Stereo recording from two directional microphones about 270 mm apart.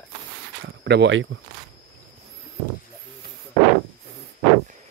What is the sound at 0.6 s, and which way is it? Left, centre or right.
Speech, right.